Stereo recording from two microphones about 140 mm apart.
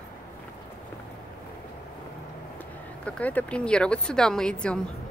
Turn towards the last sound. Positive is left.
turn(degrees=5)  # may be behind; listen again after turning